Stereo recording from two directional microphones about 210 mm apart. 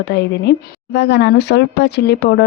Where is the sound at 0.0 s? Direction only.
55° left (ahead or behind).